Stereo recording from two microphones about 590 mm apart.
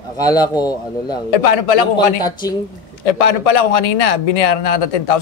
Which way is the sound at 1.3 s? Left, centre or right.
Left.